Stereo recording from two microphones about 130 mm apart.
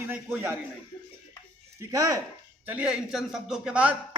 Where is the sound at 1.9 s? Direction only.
25° right (ahead or behind).